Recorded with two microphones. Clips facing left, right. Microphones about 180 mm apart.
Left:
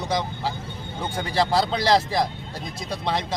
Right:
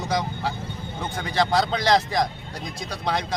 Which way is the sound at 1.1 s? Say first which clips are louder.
Even; 30° left (ahead or behind).